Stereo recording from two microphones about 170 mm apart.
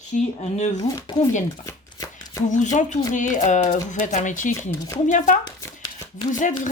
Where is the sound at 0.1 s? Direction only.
50° left (ahead or behind).